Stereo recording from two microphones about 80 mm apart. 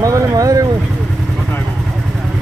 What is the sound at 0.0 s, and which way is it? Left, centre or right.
Vehicle, right.